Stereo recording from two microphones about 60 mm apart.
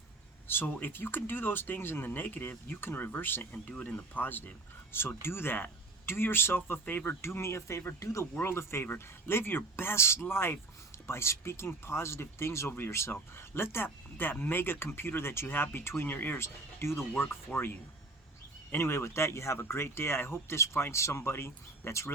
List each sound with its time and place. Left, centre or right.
0.4 s speech: left
3.5 s speech: left
7.2 s speech: left
8.4 s speech: left
16.4 s speech: left
18.7 s speech: left